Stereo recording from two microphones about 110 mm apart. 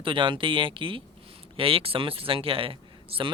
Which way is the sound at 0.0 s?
50° right (ahead or behind).